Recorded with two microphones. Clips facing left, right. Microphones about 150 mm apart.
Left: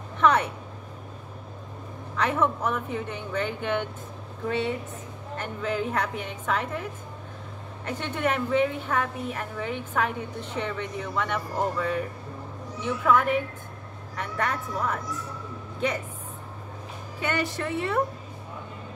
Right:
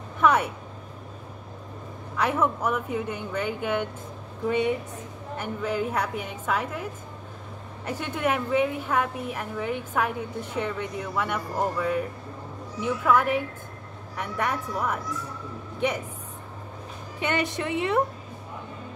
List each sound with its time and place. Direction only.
0.2 s speech: 10° right (ahead or behind)
2.1 s a woman's voice: 10° right (ahead or behind)
17.2 s a woman's voice: 20° right (ahead or behind)